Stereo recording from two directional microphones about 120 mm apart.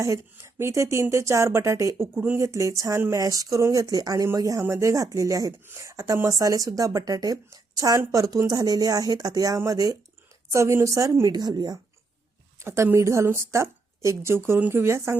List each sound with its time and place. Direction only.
0.0 s speech: 25° right (ahead or behind)
12.5 s speech: 20° right (ahead or behind)